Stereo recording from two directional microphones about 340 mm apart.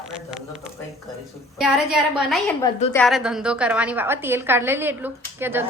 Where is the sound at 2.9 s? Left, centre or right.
Centre.